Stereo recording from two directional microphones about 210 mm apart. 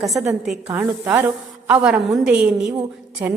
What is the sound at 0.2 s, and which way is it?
A woman's voice, 5° right (ahead or behind).